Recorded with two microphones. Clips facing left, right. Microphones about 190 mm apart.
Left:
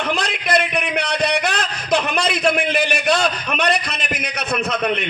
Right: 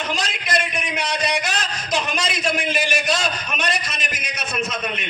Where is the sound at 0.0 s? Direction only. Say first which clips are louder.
Left 4 dB; 60° left (ahead or behind).